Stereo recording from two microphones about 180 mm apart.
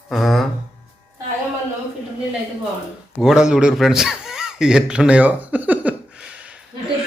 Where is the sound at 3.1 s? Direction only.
Centre (ahead or behind).